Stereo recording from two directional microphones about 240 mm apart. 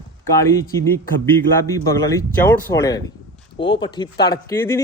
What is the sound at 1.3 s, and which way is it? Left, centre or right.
Speech, centre.